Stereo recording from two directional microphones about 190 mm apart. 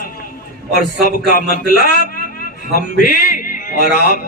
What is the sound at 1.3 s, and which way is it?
Speech, 45° left (ahead or behind).